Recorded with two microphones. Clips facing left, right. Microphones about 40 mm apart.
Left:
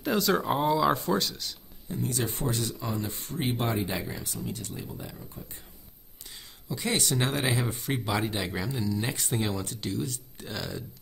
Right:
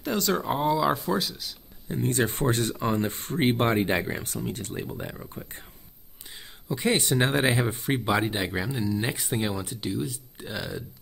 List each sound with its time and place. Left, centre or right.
0.0 s speech: centre
1.9 s speech: right
6.7 s speech: right